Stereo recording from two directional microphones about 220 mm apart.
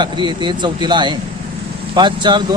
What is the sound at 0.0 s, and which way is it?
Speech, 20° right (ahead or behind).